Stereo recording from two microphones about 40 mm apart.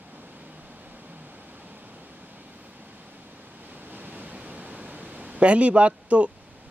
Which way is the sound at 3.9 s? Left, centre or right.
Right.